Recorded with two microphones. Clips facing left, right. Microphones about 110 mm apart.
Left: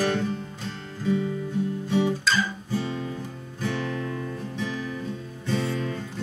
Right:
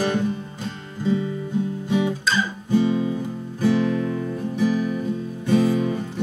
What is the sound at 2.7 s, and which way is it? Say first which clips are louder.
Music: right 11 dB; 15° right (ahead or behind).